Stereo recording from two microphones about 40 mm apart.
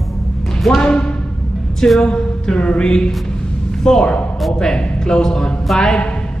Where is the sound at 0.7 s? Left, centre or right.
Left.